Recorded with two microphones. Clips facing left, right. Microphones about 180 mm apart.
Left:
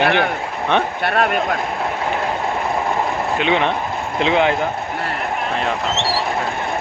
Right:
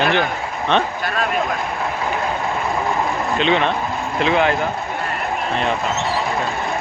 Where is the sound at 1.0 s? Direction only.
65° left (ahead or behind).